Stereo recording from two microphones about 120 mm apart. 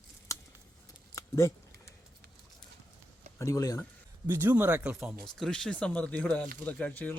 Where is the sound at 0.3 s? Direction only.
25° left (ahead or behind).